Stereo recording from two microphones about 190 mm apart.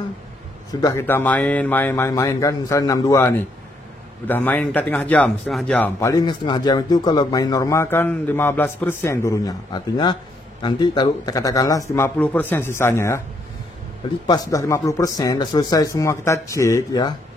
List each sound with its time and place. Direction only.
0.7 s speech: 15° left (ahead or behind)
14.2 s speech: 20° left (ahead or behind)